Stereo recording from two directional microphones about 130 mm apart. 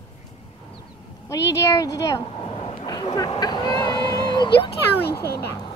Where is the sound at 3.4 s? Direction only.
30° left (ahead or behind).